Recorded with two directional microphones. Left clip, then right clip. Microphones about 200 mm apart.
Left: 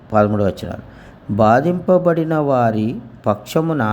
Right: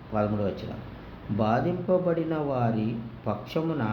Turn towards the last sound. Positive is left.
turn(degrees=45)  # may be behind; listen again after turning